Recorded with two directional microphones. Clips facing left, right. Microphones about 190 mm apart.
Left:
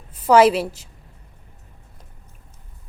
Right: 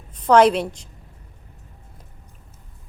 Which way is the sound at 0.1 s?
5° left (ahead or behind).